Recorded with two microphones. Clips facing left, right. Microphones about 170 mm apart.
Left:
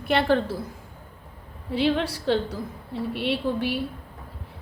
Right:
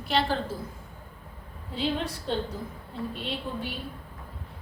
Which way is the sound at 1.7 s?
75° left (ahead or behind).